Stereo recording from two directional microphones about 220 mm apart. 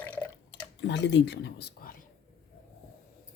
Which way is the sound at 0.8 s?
55° left (ahead or behind).